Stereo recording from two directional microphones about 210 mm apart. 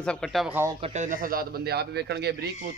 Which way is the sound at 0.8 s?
35° right (ahead or behind).